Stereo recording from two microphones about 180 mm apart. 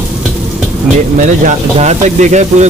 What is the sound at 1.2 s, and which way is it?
Speech, 40° right (ahead or behind).